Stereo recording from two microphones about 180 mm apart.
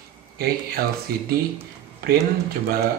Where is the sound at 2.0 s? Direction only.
60° right (ahead or behind).